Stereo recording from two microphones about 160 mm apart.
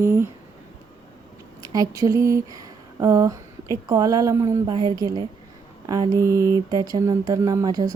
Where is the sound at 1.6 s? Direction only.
25° right (ahead or behind).